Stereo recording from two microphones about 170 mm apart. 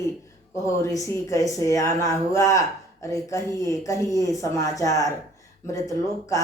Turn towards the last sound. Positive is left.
turn(degrees=20)  # may be behind; listen again after turning